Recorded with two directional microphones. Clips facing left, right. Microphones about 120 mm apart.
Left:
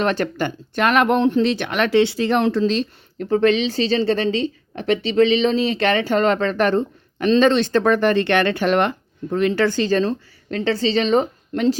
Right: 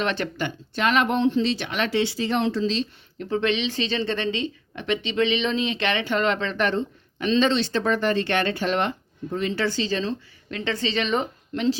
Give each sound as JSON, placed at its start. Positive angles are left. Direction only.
{"t": 0.0, "sound": "speech", "side_deg": 40}